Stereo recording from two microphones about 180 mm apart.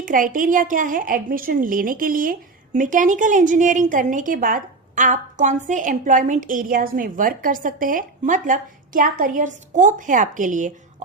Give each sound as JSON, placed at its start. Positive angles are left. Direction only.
{"t": 0.0, "sound": "a woman's voice", "side_deg": -50}